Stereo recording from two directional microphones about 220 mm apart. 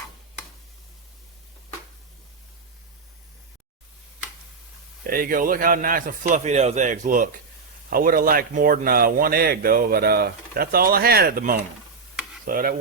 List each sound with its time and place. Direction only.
5.0 s a man's voice: 40° right (ahead or behind)